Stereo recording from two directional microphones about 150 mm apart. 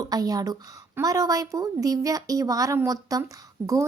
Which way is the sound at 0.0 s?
25° right (ahead or behind).